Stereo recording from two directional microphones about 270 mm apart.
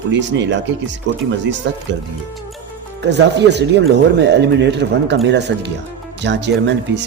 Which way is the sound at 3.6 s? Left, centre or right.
Right.